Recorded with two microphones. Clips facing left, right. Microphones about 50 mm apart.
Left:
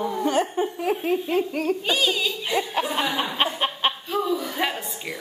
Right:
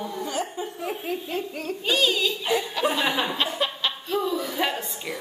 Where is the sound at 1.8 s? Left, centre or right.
Centre.